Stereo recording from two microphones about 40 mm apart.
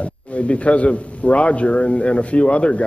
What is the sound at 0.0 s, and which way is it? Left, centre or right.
A man's voice, left.